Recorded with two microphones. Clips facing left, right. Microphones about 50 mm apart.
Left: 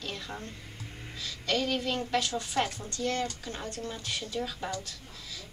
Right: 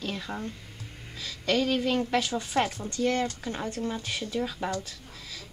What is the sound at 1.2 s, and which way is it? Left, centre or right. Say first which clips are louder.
Speech: right 4 dB; centre.